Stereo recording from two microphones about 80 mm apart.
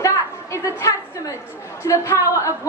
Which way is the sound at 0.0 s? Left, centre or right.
Left.